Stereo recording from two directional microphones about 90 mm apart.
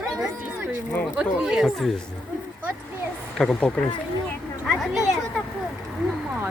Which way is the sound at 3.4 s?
5° left (ahead or behind).